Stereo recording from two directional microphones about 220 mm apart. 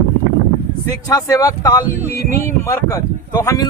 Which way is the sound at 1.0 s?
15° left (ahead or behind).